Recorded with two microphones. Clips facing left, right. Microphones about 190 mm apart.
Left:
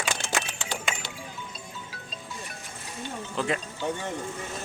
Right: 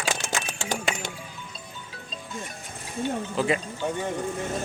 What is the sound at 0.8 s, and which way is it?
Music, 45° right (ahead or behind).